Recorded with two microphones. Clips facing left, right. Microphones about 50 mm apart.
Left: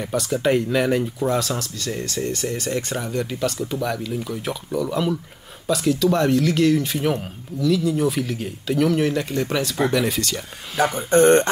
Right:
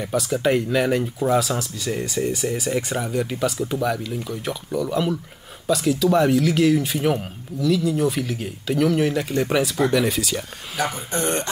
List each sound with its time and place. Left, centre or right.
0.0 s speech: centre
11.0 s speech: left